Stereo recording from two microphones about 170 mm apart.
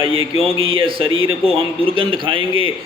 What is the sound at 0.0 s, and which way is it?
A man's voice, 30° right (ahead or behind).